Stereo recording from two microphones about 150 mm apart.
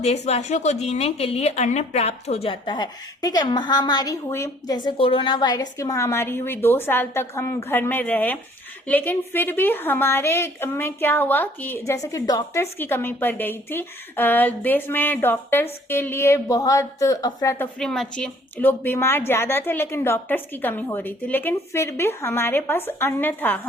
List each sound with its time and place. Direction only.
0.0 s a woman's voice: 45° left (ahead or behind); by 12.6 s 25° left (ahead or behind)
12.8 s a woman's voice: 15° left (ahead or behind)
17.7 s a woman's voice: 5° left (ahead or behind)